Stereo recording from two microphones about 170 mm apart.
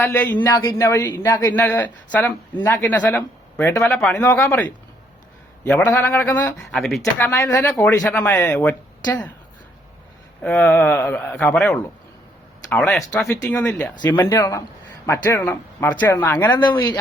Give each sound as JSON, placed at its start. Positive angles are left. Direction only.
{"t": 0.0, "sound": "speech", "side_deg": 10}
{"t": 0.4, "sound": "speech", "side_deg": 25}
{"t": 7.0, "sound": "speech", "side_deg": 15}
{"t": 10.4, "sound": "speech", "side_deg": 10}
{"t": 16.6, "sound": "speech", "side_deg": 25}